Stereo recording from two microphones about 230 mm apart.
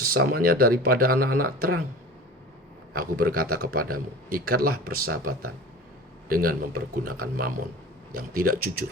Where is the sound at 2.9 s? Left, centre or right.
Right.